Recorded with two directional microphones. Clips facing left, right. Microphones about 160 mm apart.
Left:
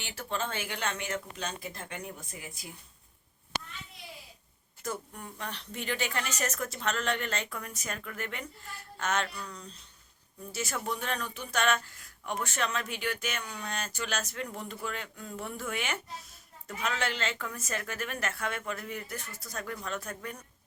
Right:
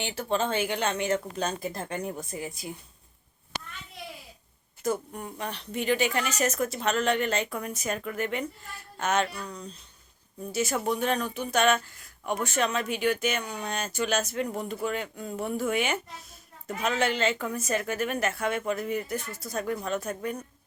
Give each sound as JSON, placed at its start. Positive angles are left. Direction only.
{"t": 0.0, "sound": "speech", "side_deg": -25}
{"t": 1.4, "sound": "speech", "side_deg": -45}
{"t": 4.8, "sound": "speech", "side_deg": -20}
{"t": 10.5, "sound": "speech", "side_deg": -20}